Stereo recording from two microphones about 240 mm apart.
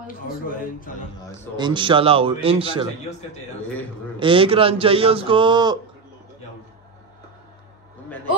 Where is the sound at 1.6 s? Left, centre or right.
Centre.